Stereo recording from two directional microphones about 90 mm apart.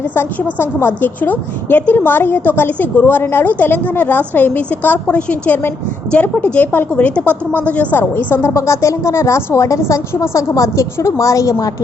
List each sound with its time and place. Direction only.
0.1 s a woman's voice: 20° left (ahead or behind); by 11.7 s 40° left (ahead or behind)